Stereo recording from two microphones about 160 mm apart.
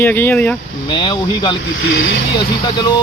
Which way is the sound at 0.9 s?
30° left (ahead or behind).